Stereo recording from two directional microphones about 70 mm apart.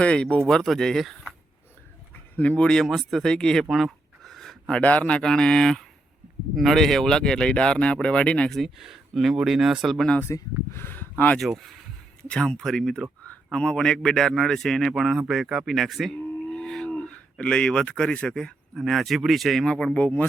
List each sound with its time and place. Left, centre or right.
0.0 s speech: centre
2.3 s speech: centre
4.2 s a sound: centre
4.8 s speech: centre
8.4 s speech: centre
10.3 s speech: left
10.7 s speech: left
11.4 s speech: centre
12.3 s speech: centre